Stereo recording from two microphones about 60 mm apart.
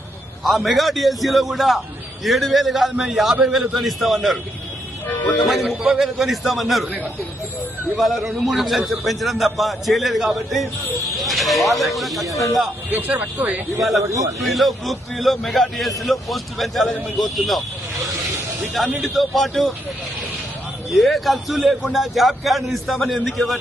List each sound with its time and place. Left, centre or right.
0.4 s a man's voice: centre
5.5 s a man's voice: centre
12.9 s speech: right
13.7 s a man's voice: centre
14.0 s a man's voice: right
14.4 s a man's voice: centre
19.0 s a man's voice: centre
20.9 s a man's voice: centre